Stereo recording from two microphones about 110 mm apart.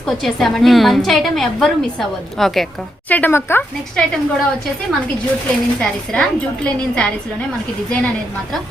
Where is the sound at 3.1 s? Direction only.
15° left (ahead or behind).